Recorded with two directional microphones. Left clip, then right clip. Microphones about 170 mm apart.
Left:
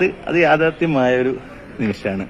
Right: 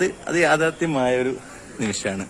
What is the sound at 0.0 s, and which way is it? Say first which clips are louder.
Speech: left 4 dB; centre (ahead or behind).